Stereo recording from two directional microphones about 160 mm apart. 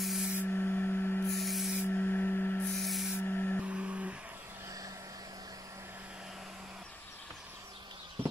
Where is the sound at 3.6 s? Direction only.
5° right (ahead or behind).